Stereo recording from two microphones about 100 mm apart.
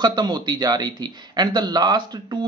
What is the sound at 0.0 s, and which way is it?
Speech, 50° right (ahead or behind).